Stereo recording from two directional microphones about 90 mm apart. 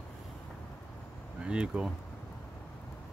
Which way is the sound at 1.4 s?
10° right (ahead or behind).